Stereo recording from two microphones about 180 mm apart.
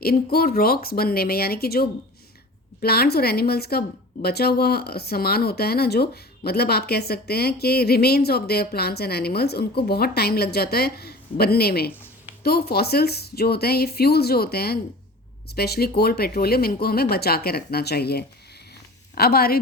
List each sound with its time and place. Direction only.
0.0 s a woman's voice: 60° left (ahead or behind)